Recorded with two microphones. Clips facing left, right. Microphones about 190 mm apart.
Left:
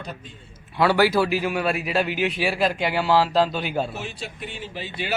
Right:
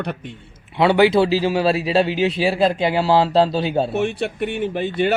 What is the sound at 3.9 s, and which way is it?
A man's voice, 60° right (ahead or behind).